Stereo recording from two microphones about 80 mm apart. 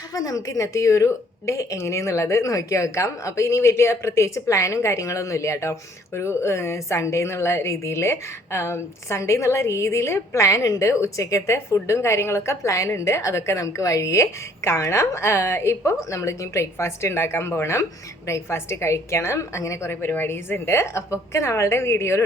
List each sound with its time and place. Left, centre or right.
0.1 s a woman's voice: left